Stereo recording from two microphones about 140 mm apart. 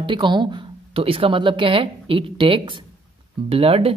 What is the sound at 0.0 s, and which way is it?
Speech, 35° right (ahead or behind).